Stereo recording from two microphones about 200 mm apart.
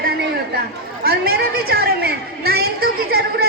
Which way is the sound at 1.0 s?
50° right (ahead or behind).